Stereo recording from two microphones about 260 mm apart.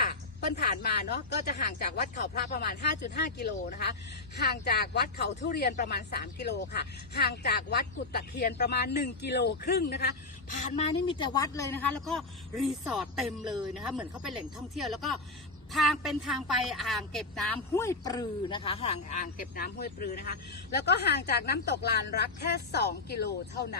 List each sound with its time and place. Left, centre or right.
0.0 s speech: left
10.6 s speech: left